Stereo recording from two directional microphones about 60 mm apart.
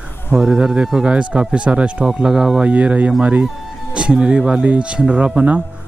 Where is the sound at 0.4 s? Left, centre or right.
Centre.